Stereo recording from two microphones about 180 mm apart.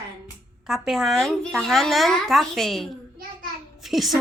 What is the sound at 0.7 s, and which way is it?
A child's voice, centre (ahead or behind).